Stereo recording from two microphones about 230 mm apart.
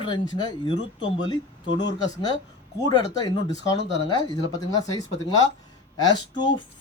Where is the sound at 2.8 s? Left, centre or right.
Centre.